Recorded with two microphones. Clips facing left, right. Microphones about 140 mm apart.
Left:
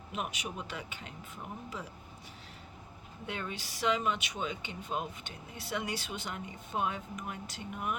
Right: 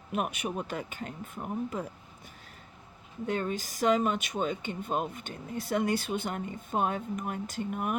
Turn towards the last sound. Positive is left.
turn(degrees=-50)  # may be behind; listen again after turning